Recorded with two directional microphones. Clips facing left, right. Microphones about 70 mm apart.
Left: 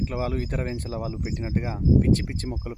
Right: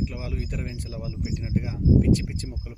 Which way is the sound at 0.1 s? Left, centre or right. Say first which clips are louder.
Left 6 dB; left.